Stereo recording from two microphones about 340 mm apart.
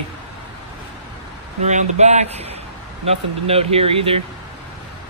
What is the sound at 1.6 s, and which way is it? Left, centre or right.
Speech, centre.